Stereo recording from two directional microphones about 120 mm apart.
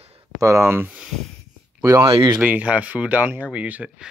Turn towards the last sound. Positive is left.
turn(degrees=-10)  # may be behind; listen again after turning